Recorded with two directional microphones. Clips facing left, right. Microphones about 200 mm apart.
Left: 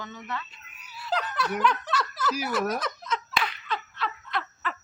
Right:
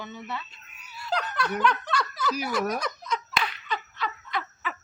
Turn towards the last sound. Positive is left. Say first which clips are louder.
# even
turn(degrees=0)  # may be behind; listen again after turning